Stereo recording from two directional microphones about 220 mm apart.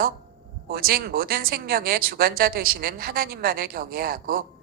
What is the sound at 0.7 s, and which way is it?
Speech, 40° right (ahead or behind).